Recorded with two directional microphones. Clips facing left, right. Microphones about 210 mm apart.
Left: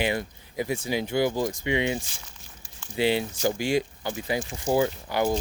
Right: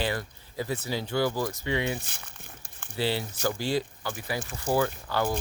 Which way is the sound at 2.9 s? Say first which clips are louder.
Left 5 dB; 15° left (ahead or behind).